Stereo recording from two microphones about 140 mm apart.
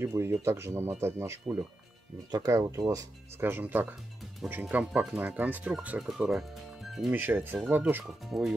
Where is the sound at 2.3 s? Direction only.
25° right (ahead or behind).